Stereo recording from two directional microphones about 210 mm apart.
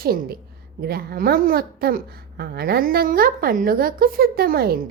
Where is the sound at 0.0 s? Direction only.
45° right (ahead or behind).